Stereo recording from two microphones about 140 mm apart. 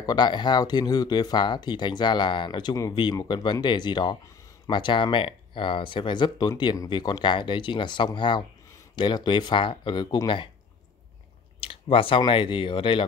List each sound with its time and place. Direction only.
0.0 s speech: 30° left (ahead or behind)
11.6 s speech: 40° left (ahead or behind)